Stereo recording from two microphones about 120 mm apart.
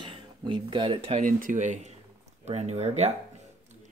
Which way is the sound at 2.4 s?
65° right (ahead or behind).